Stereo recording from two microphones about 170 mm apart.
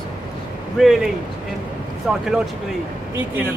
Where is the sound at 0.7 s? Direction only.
Centre (ahead or behind).